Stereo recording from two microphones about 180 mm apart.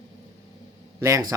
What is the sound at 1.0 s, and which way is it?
Speech, 15° right (ahead or behind).